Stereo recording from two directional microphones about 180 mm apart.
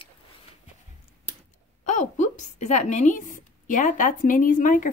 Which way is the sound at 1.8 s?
40° left (ahead or behind).